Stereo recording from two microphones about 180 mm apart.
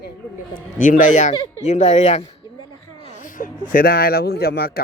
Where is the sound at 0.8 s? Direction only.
45° left (ahead or behind).